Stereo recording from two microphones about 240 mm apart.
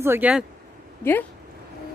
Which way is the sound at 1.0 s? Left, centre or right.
Centre.